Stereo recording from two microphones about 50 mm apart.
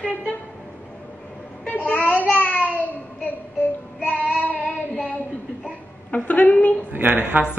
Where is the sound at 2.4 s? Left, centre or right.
Left.